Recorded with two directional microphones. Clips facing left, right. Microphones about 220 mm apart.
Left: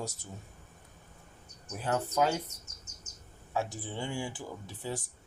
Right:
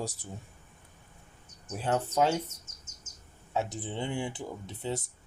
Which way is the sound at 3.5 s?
20° right (ahead or behind).